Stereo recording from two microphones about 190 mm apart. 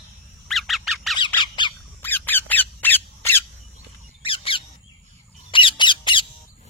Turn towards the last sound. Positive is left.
turn(degrees=25)  # may be behind; listen again after turning